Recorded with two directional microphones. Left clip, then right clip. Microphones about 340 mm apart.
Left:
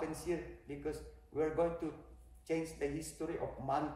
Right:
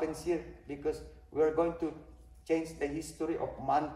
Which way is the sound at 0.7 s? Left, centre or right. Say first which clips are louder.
Right 8 dB; right.